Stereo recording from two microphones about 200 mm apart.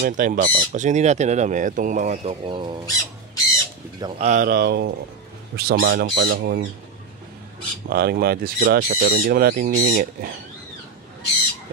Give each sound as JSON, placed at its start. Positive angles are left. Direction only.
{"t": 0.0, "sound": "speech", "side_deg": -40}
{"t": 2.9, "sound": "bird", "side_deg": 15}
{"t": 4.2, "sound": "speech", "side_deg": -40}
{"t": 7.9, "sound": "speech", "side_deg": -50}